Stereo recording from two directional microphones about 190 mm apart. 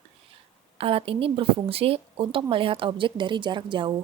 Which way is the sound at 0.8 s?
30° right (ahead or behind).